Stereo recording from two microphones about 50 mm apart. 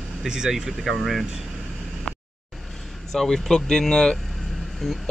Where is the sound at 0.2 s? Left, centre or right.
Centre.